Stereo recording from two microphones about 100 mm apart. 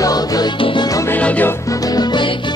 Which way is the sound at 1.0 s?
15° left (ahead or behind).